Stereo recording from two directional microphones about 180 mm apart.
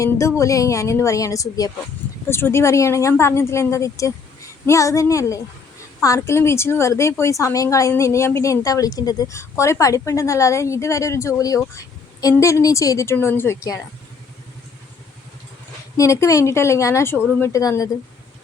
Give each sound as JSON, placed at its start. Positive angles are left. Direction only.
{"t": 0.0, "sound": "a woman's voice", "side_deg": 15}
{"t": 16.0, "sound": "a woman's voice", "side_deg": 15}